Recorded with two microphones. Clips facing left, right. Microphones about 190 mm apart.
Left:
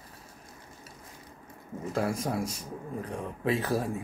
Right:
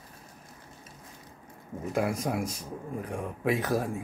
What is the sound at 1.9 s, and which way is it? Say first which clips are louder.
Speech: right 1 dB; 15° right (ahead or behind).